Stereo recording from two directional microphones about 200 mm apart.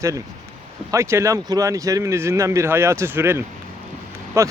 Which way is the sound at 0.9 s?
15° right (ahead or behind).